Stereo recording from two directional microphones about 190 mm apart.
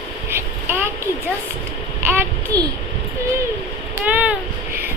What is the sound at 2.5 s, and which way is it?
Speech, 20° right (ahead or behind).